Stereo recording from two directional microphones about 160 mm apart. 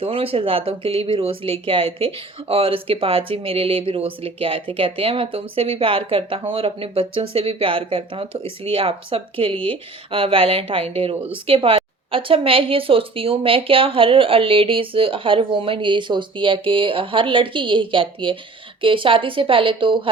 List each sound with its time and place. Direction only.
0.0 s speech: 35° right (ahead or behind)